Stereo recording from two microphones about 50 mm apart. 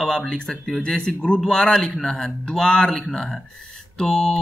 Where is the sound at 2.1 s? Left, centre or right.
Centre.